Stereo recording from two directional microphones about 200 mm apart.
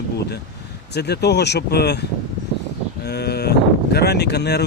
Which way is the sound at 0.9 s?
55° left (ahead or behind).